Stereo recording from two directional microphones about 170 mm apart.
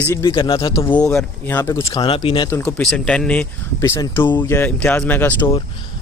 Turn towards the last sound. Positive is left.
turn(degrees=10)  # may be behind; listen again after turning